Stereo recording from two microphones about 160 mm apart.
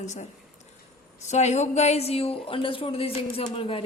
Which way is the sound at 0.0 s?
45° left (ahead or behind).